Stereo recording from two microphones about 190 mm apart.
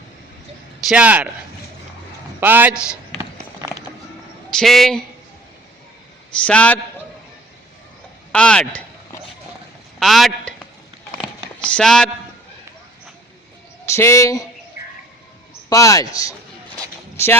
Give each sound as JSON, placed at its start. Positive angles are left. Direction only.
{"t": 0.9, "sound": "a man's voice", "side_deg": -5}
{"t": 2.4, "sound": "a man's voice", "side_deg": -10}
{"t": 3.2, "sound": "a sound", "side_deg": -15}
{"t": 4.5, "sound": "speech", "side_deg": 0}
{"t": 6.4, "sound": "speech", "side_deg": 5}
{"t": 8.3, "sound": "a sound", "side_deg": 5}
{"t": 10.0, "sound": "a man's voice", "side_deg": 0}
{"t": 11.6, "sound": "speech", "side_deg": 5}
{"t": 13.8, "sound": "a man's voice", "side_deg": 15}
{"t": 15.7, "sound": "speech", "side_deg": 15}